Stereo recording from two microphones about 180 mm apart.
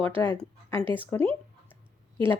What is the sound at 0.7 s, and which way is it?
Speech, 30° right (ahead or behind).